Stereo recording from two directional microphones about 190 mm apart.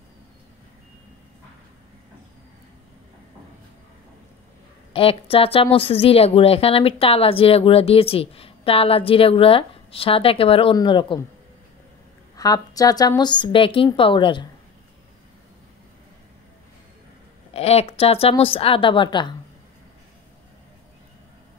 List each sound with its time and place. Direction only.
4.9 s a woman's voice: 30° left (ahead or behind)
12.4 s a woman's voice: 20° left (ahead or behind)
17.6 s a woman's voice: 35° left (ahead or behind)